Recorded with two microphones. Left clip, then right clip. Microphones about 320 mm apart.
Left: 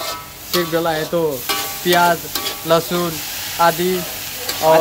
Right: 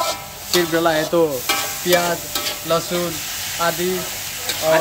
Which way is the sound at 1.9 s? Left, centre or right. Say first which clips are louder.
Left 4 dB; centre.